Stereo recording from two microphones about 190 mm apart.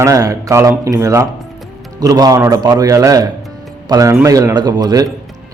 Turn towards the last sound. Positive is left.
turn(degrees=-20)  # may be behind; listen again after turning